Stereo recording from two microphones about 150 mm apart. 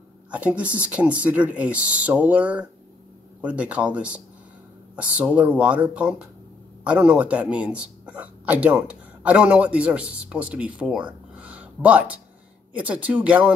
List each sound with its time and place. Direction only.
0.3 s speech: 10° right (ahead or behind)
11.3 s a sound: 10° right (ahead or behind)
12.7 s speech: 10° right (ahead or behind)